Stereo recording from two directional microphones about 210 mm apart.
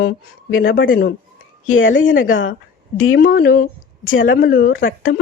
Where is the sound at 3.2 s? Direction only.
45° left (ahead or behind).